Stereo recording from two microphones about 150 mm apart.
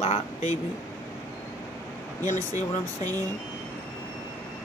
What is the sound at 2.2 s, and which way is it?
Speech, 50° left (ahead or behind).